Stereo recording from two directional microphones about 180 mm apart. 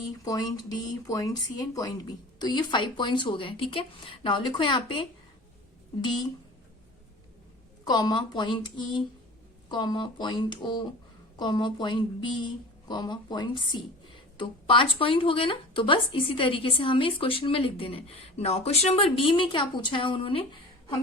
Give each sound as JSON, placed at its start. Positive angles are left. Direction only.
{"t": 0.3, "sound": "speech", "side_deg": 20}
{"t": 7.9, "sound": "speech", "side_deg": 20}